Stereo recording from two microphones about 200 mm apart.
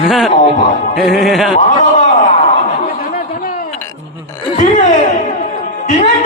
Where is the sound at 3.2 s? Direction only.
45° left (ahead or behind).